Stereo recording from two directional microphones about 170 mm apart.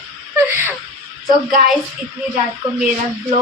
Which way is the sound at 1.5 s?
55° right (ahead or behind).